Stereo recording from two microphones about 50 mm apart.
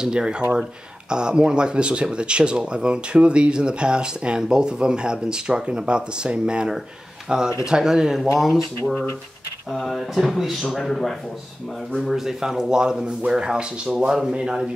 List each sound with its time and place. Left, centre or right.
0.0 s speech: centre
9.7 s speech: centre
12.1 s speech: centre